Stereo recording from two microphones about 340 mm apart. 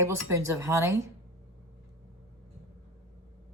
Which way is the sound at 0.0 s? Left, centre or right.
Centre.